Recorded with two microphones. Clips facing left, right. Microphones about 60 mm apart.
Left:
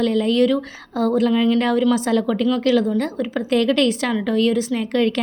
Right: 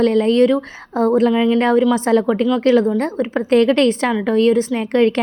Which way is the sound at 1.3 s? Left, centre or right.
Centre.